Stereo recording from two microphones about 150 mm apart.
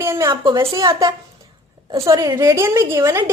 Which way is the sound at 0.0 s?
20° right (ahead or behind).